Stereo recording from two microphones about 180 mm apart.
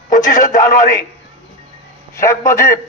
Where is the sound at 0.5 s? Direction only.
45° left (ahead or behind).